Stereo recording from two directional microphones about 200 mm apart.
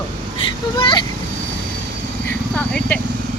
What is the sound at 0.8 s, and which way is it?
Speech, 25° left (ahead or behind).